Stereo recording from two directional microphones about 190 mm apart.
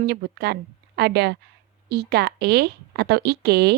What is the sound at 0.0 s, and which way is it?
Speech, 55° right (ahead or behind).